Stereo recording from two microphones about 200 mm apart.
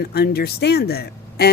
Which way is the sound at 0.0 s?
50° left (ahead or behind).